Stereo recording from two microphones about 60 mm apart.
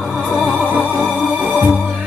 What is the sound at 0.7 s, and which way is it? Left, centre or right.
Music, right.